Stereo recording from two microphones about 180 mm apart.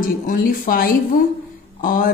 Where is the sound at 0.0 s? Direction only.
50° left (ahead or behind).